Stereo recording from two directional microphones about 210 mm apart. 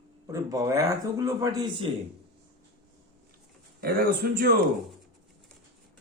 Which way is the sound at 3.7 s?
45° right (ahead or behind).